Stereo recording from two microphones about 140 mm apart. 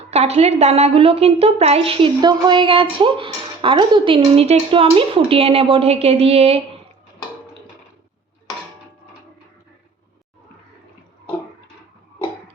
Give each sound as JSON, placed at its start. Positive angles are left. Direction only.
{"t": 0.1, "sound": "a woman's voice", "side_deg": -50}